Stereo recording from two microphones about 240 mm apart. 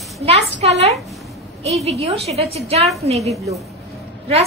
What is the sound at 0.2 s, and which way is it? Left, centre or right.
A woman's voice, right.